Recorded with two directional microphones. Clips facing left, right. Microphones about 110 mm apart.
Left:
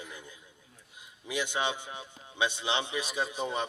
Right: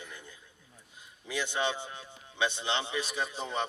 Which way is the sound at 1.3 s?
15° left (ahead or behind).